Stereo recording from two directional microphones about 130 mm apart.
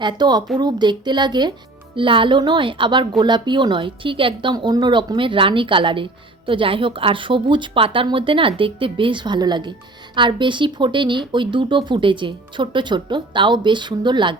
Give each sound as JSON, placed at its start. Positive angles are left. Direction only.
{"t": 0.0, "sound": "a woman's voice", "side_deg": -35}